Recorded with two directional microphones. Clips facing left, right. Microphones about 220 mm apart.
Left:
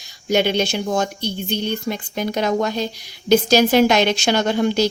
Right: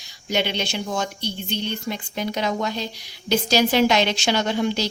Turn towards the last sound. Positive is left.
turn(degrees=50)  # may be behind; listen again after turning